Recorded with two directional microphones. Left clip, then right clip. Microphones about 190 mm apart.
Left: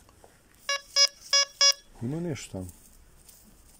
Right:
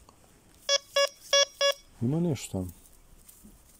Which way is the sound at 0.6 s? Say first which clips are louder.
Left 1 dB; 40° right (ahead or behind).